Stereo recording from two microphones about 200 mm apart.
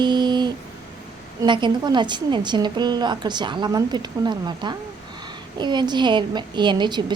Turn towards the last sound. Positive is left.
turn(degrees=-20)  # may be behind; listen again after turning